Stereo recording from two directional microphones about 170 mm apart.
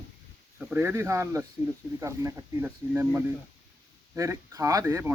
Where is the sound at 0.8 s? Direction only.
15° right (ahead or behind).